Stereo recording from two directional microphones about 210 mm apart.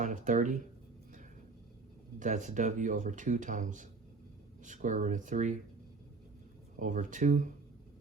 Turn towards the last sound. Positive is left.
turn(degrees=-35)  # may be behind; listen again after turning